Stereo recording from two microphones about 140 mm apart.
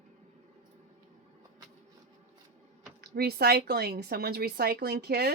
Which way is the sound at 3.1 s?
90° right.